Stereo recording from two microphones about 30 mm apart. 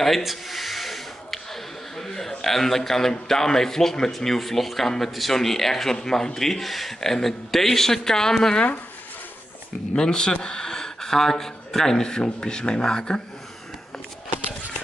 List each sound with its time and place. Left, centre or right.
0.2 s a sound: centre
4.1 s a man's voice: centre
5.9 s a man's voice: left
9.9 s speech: left